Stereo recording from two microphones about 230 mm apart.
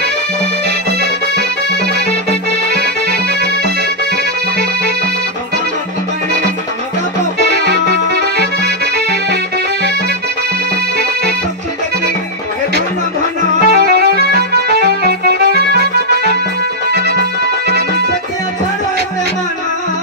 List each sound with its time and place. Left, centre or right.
2.7 s accordion: right
7.5 s music: right
13.7 s music: right